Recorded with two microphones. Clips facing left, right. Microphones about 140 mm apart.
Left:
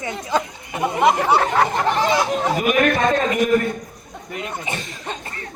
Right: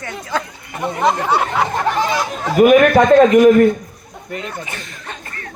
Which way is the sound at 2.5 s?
80° right.